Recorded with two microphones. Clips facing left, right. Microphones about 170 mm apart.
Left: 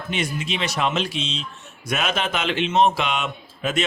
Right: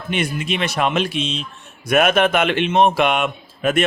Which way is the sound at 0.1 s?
55° right (ahead or behind).